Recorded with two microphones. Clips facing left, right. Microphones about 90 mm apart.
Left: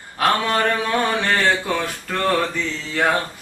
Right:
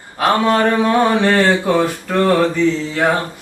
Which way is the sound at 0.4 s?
15° right (ahead or behind).